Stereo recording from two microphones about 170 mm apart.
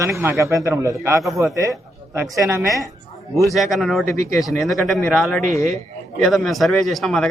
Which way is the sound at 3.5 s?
Centre (ahead or behind).